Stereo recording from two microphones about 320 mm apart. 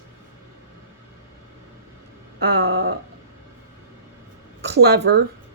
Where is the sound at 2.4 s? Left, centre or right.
Right.